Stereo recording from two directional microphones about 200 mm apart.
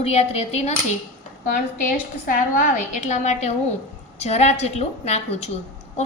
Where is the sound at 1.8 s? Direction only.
40° left (ahead or behind).